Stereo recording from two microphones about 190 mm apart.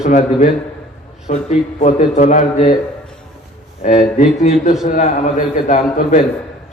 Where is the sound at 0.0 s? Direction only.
40° left (ahead or behind).